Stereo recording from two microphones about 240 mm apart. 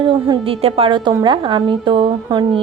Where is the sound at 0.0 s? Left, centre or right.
Right.